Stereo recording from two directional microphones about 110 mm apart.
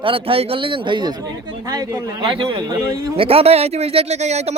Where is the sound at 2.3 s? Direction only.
50° right (ahead or behind).